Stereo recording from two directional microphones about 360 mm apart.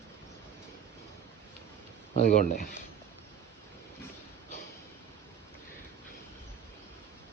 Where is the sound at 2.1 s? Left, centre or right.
Left.